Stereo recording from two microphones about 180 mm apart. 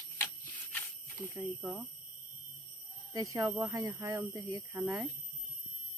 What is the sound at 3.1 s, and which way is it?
Speech, 20° right (ahead or behind).